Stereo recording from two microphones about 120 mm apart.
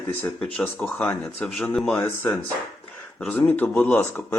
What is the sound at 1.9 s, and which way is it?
Speech, 20° left (ahead or behind).